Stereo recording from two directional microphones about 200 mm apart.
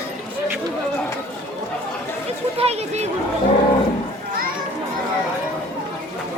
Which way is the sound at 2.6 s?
30° right (ahead or behind).